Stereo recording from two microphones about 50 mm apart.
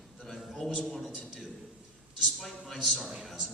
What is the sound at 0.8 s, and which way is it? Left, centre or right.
Speech, centre.